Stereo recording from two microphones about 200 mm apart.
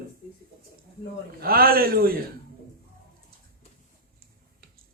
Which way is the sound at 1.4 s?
50° right (ahead or behind).